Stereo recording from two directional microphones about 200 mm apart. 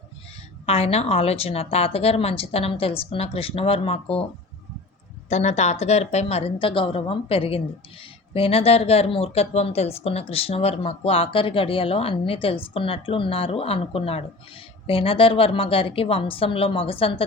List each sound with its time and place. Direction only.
0.6 s speech: 30° left (ahead or behind)
5.3 s speech: 35° left (ahead or behind)